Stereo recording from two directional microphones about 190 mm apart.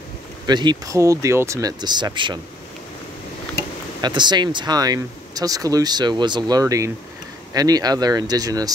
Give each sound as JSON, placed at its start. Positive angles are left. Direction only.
{"t": 0.5, "sound": "speech", "side_deg": -20}
{"t": 4.0, "sound": "speech", "side_deg": -25}